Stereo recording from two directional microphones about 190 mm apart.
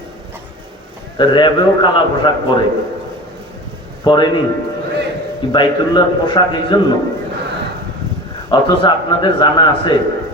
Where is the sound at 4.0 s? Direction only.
25° left (ahead or behind).